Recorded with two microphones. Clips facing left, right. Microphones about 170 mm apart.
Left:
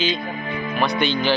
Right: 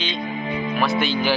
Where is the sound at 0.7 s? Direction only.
Centre (ahead or behind).